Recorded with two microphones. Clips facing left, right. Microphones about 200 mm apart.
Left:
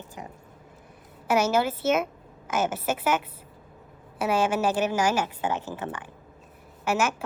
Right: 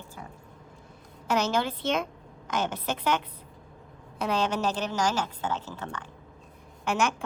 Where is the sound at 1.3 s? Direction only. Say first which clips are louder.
Left 4 dB; 10° left (ahead or behind).